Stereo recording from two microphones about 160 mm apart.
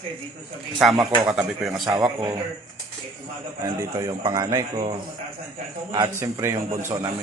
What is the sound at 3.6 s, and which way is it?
Speech, 20° right (ahead or behind).